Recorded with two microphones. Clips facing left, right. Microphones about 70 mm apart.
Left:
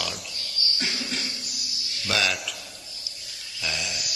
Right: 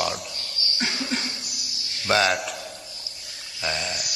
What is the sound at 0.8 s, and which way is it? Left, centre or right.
Cough, right.